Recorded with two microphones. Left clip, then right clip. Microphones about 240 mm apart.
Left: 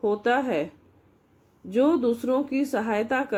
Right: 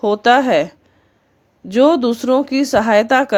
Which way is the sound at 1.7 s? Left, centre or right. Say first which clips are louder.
Right 9 dB; right.